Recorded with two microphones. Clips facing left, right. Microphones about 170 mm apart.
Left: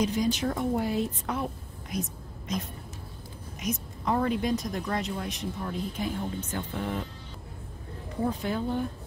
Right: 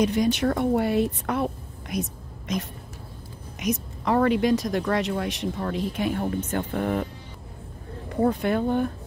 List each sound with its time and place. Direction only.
0.0 s a woman's voice: 65° right (ahead or behind)
8.1 s speech: 60° right (ahead or behind)